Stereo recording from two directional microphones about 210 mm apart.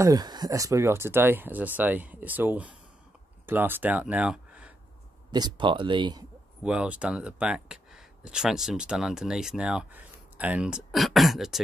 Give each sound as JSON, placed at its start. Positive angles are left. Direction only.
{"t": 0.0, "sound": "speech", "side_deg": -20}
{"t": 5.3, "sound": "speech", "side_deg": -20}
{"t": 6.6, "sound": "speech", "side_deg": -5}